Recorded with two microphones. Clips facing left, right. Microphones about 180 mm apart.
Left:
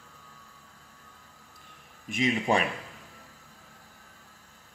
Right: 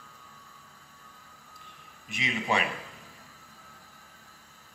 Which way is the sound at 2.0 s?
45° left (ahead or behind).